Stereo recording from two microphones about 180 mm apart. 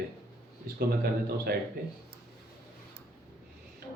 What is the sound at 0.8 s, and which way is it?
Speech, 60° right (ahead or behind).